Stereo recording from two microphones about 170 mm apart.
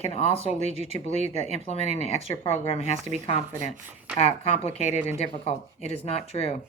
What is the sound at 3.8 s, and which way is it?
Speech, 10° right (ahead or behind).